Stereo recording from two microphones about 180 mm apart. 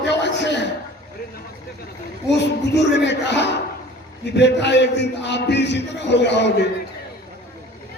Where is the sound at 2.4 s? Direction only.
75° left (ahead or behind).